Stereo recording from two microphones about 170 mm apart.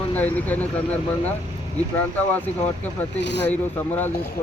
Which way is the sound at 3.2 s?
90° left.